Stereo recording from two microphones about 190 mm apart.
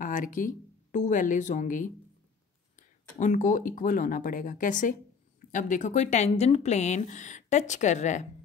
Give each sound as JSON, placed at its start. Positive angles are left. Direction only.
{"t": 0.0, "sound": "speech", "side_deg": 45}
{"t": 3.2, "sound": "speech", "side_deg": 40}